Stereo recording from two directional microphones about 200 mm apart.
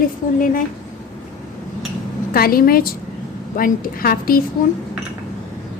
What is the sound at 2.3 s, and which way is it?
A woman's voice, 50° left (ahead or behind).